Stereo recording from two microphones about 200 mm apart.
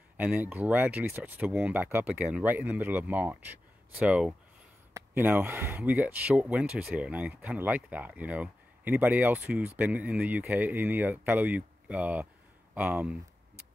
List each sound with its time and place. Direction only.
0.2 s speech: 10° right (ahead or behind)